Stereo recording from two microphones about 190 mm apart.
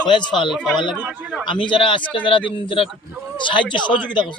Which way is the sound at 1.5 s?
25° left (ahead or behind).